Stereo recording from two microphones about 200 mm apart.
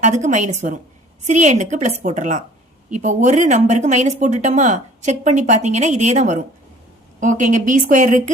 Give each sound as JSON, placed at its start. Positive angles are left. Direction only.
{"t": 0.0, "sound": "speech", "side_deg": -35}